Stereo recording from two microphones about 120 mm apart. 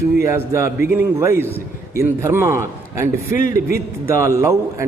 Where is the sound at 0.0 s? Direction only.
25° right (ahead or behind).